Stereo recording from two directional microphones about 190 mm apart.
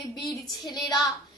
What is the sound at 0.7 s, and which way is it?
Speech, 20° left (ahead or behind).